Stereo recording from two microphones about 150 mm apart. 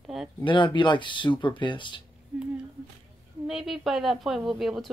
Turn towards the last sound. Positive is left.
turn(degrees=0)  # may be behind; listen again after turning